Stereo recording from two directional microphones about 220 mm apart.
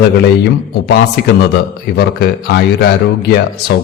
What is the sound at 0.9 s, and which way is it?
A man's voice, 45° left (ahead or behind).